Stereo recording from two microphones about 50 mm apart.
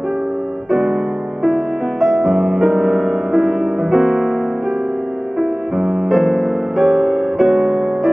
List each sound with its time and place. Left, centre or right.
0.7 s music: centre
5.4 s music: centre